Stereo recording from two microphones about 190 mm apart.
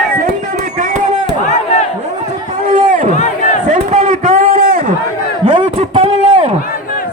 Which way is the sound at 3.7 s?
35° right (ahead or behind).